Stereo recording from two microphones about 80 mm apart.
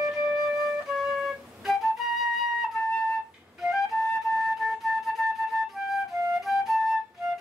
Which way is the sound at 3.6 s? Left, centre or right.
Centre.